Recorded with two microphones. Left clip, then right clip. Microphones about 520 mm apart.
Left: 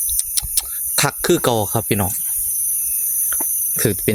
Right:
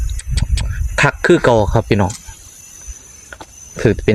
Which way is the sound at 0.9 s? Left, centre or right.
Left.